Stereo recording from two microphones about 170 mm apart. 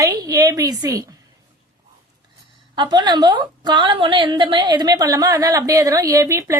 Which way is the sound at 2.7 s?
25° right (ahead or behind).